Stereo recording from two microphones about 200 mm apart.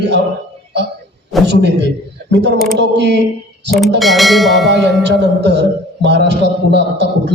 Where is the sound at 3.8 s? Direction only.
Centre (ahead or behind).